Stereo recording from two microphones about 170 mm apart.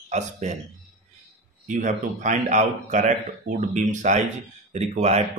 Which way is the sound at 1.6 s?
45° right (ahead or behind).